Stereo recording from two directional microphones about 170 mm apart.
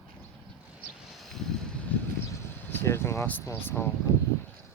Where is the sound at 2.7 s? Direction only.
15° left (ahead or behind).